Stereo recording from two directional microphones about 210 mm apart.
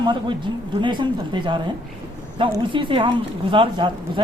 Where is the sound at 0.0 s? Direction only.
20° right (ahead or behind).